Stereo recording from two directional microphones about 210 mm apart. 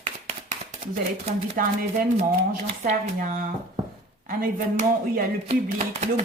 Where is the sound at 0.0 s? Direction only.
35° right (ahead or behind).